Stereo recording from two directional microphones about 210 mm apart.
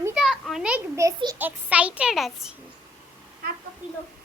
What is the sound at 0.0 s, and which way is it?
A child's voice, 5° right (ahead or behind).